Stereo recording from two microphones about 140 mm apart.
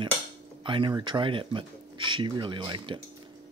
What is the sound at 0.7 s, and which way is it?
Speech, 35° right (ahead or behind).